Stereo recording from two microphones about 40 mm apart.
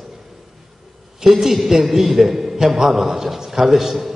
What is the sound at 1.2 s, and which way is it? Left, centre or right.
A man's voice, centre.